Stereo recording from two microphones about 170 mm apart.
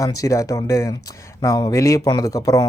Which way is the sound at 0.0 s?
20° left (ahead or behind).